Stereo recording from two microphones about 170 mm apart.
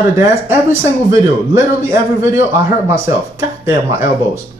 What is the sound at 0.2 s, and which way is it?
A man's voice, 15° right (ahead or behind).